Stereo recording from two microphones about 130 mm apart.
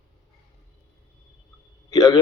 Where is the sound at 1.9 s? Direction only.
30° left (ahead or behind).